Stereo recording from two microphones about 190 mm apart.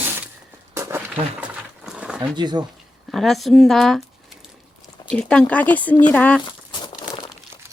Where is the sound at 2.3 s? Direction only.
20° right (ahead or behind).